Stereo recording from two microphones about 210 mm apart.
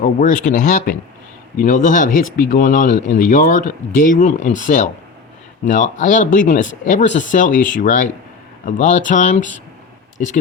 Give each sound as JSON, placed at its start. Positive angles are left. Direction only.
{"t": 0.0, "sound": "speech", "side_deg": 40}